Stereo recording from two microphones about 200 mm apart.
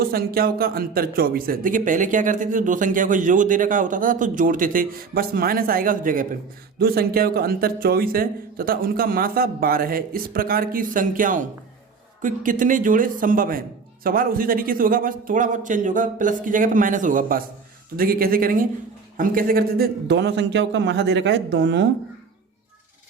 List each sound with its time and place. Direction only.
0.0 s a man's voice: 50° right (ahead or behind)